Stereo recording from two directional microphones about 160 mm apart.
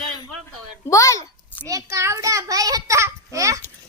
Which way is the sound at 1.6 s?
20° right (ahead or behind).